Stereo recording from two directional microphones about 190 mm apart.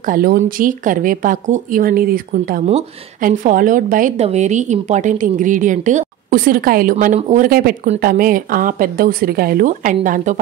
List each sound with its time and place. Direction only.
0.0 s a woman's voice: 50° right (ahead or behind)